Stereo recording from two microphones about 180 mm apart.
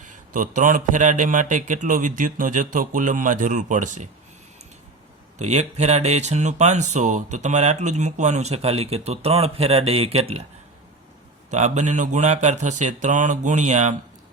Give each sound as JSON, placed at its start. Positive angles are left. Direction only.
{"t": 0.0, "sound": "speech", "side_deg": -45}
{"t": 5.4, "sound": "speech", "side_deg": -40}
{"t": 11.5, "sound": "speech", "side_deg": -40}